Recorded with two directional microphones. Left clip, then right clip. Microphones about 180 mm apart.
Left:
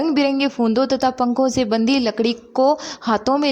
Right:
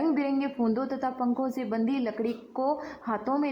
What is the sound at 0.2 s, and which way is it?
A woman's voice, 25° left (ahead or behind).